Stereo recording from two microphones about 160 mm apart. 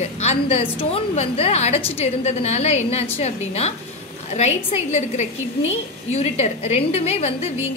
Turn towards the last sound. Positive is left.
turn(degrees=40)  # may be behind; listen again after turning